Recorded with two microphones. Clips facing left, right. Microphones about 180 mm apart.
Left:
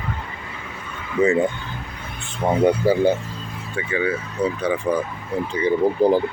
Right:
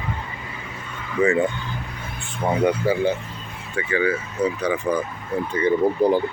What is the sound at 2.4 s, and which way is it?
Speech, 30° left (ahead or behind).